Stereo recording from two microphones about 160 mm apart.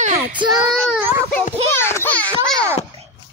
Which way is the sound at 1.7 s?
15° left (ahead or behind).